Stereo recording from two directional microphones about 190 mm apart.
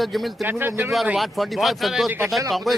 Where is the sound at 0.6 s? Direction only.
10° right (ahead or behind).